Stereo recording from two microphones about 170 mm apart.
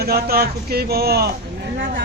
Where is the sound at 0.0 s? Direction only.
65° right (ahead or behind).